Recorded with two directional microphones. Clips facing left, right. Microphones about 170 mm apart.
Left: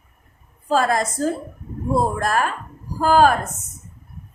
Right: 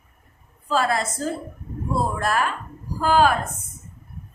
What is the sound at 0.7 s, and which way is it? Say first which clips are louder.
A woman's voice: left 3 dB; 45° left (ahead or behind).